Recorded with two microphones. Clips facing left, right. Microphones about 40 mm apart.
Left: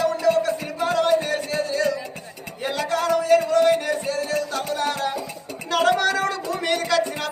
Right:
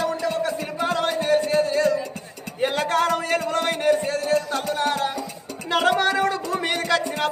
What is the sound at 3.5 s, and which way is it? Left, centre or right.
Music, right.